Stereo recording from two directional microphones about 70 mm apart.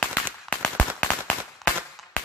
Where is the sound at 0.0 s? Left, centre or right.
Centre.